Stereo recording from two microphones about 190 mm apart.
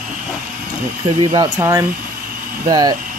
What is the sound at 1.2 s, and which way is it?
Speech, 20° right (ahead or behind).